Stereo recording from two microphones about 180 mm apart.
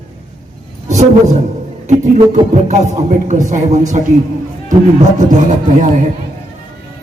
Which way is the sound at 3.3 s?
40° right (ahead or behind).